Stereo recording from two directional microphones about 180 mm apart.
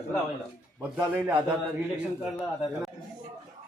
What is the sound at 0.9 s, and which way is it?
Speech, 10° right (ahead or behind).